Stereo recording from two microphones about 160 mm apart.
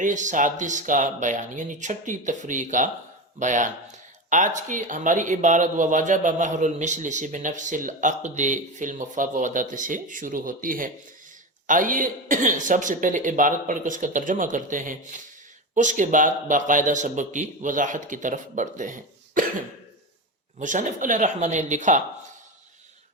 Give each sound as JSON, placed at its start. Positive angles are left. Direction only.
{"t": 0.0, "sound": "speech", "side_deg": -50}
{"t": 20.6, "sound": "speech", "side_deg": -55}